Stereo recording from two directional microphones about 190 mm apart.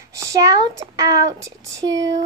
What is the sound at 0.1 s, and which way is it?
Speech, 15° right (ahead or behind).